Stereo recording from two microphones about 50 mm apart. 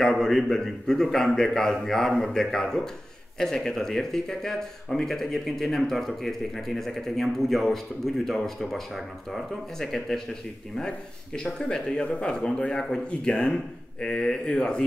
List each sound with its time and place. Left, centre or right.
0.2 s speech: centre